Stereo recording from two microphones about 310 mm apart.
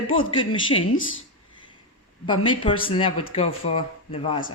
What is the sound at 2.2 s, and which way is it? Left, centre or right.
Speech, centre.